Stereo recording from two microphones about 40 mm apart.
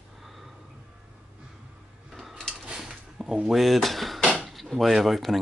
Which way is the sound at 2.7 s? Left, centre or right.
Centre.